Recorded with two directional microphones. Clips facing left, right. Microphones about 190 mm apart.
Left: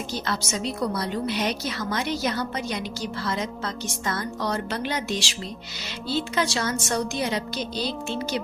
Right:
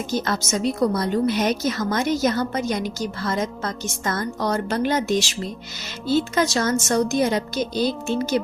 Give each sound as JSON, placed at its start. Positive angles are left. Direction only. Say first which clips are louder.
{"t": 0.1, "sound": "a woman's voice", "louder": "right 7 dB", "side_deg": -45}